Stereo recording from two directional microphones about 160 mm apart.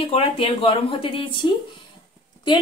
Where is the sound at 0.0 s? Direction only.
35° left (ahead or behind).